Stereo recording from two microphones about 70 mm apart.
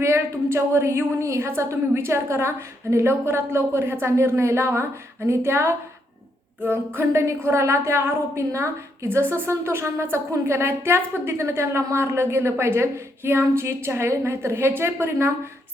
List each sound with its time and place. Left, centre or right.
0.0 s a woman's voice: right